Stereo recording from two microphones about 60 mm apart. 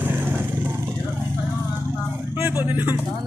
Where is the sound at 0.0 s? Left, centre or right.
Right.